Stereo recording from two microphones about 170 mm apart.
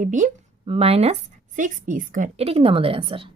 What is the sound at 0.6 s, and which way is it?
Speech, 35° right (ahead or behind).